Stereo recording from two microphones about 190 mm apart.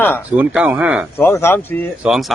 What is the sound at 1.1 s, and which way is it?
Speech, 15° left (ahead or behind).